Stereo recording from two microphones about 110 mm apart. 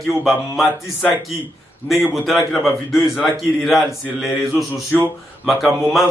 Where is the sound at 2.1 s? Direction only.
Centre (ahead or behind).